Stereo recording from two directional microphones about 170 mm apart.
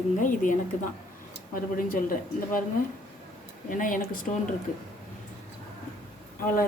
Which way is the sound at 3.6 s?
55° left (ahead or behind).